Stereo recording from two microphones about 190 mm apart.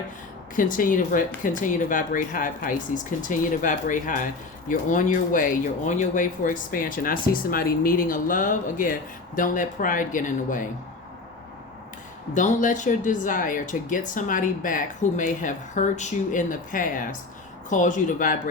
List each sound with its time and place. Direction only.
0.5 s speech: 45° left (ahead or behind)
12.3 s speech: 40° left (ahead or behind)